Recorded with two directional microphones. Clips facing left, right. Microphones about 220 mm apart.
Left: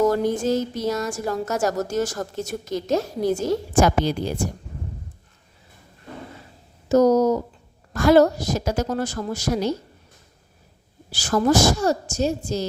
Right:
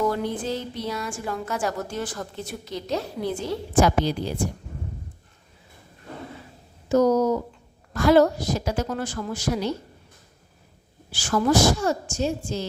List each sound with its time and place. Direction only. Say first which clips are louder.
0.0 s a woman's voice: left 5 dB; 45° left (ahead or behind)
6.8 s a woman's voice: left 3 dB; 40° left (ahead or behind)
11.1 s a woman's voice: left 2 dB; 40° left (ahead or behind)